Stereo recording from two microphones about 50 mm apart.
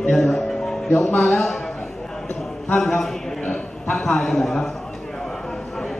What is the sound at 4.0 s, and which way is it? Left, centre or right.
Speech, centre.